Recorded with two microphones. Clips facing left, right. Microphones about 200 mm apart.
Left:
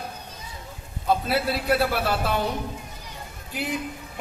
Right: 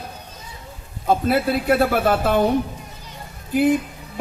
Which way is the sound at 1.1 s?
50° right (ahead or behind).